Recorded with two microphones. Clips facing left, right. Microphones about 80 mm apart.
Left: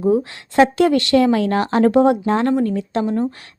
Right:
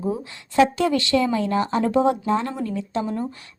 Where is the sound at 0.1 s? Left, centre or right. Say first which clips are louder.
Left 10 dB; left.